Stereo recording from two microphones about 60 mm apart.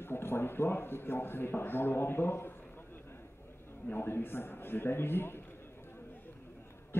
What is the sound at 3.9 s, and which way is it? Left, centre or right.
A man's voice, left.